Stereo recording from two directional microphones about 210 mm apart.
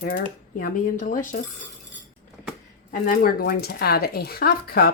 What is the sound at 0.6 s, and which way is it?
Speech, 40° left (ahead or behind).